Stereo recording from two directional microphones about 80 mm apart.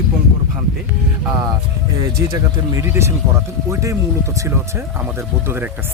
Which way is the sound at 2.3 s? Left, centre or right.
Right.